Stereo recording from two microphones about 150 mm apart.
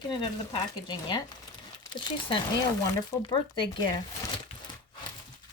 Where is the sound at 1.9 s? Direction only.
30° left (ahead or behind).